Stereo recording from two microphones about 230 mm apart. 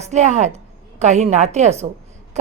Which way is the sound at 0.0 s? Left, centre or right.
Right.